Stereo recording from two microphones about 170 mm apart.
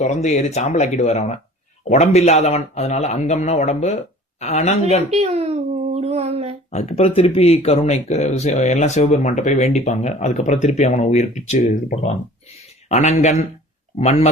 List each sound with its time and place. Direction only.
0.0 s speech: 45° left (ahead or behind)
5.1 s child singing: 40° right (ahead or behind)
6.7 s speech: 40° left (ahead or behind)